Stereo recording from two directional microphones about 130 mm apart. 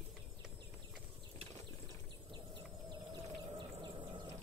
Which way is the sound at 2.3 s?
35° right (ahead or behind).